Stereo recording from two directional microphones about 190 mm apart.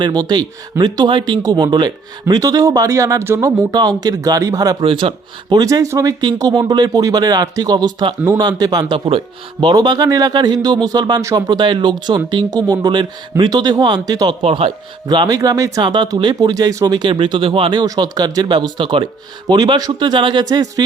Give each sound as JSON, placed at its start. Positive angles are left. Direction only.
{"t": 0.0, "sound": "speech", "side_deg": -20}